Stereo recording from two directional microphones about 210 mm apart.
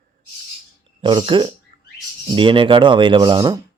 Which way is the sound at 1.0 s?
25° right (ahead or behind).